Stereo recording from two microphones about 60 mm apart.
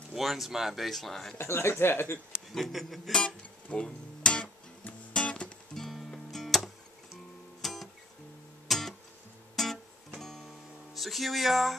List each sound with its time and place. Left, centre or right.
0.1 s speech: centre
1.4 s speech: left
2.5 s speech: centre
3.1 s music: centre
5.8 s music: centre
11.0 s speech: centre